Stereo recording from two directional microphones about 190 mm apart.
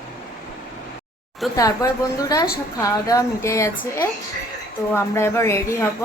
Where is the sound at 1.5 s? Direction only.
15° left (ahead or behind).